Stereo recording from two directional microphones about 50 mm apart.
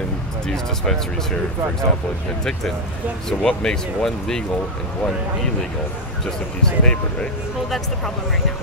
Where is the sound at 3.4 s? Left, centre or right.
Left.